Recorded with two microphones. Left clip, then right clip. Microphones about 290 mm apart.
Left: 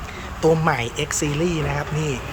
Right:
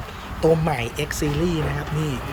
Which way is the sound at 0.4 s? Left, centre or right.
Centre.